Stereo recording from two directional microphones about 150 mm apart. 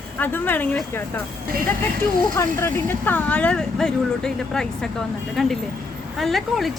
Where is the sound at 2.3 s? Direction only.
20° left (ahead or behind).